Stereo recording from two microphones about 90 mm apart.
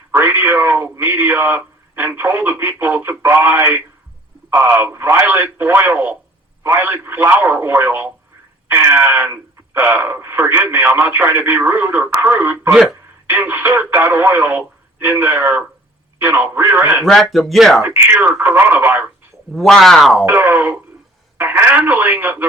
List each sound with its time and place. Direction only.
0.1 s speech: 25° right (ahead or behind)
17.0 s speech: centre (ahead or behind)
17.8 s speech: 25° right (ahead or behind)
19.5 s speech: centre (ahead or behind)
20.2 s speech: 20° right (ahead or behind)